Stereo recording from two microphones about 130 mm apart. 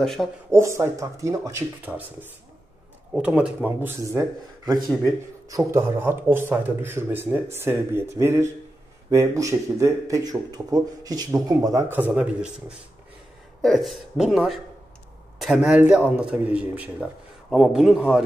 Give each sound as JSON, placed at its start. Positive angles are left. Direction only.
{"t": 0.0, "sound": "speech", "side_deg": 0}
{"t": 0.5, "sound": "speech", "side_deg": -20}
{"t": 3.1, "sound": "speech", "side_deg": -5}
{"t": 11.9, "sound": "speech", "side_deg": -15}